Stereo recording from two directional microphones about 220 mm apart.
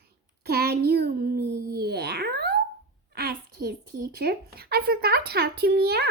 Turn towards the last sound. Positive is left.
turn(degrees=-45)  # may be behind; listen again after turning